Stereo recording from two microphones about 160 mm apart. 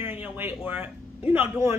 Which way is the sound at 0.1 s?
10° right (ahead or behind).